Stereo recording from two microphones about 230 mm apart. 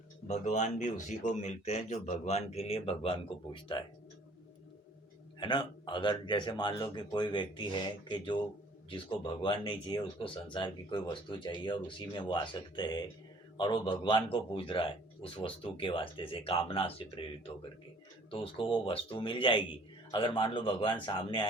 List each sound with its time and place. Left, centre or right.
0.3 s speech: left
5.4 s speech: centre